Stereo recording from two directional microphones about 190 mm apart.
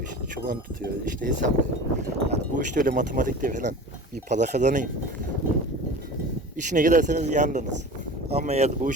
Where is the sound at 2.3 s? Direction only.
45° right (ahead or behind).